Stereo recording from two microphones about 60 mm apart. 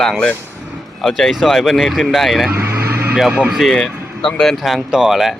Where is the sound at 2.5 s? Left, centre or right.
Right.